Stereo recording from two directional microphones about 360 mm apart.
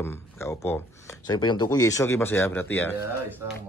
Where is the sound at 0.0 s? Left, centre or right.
Centre.